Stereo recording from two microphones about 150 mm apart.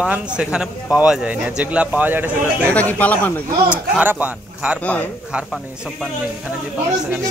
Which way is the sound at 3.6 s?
10° right (ahead or behind).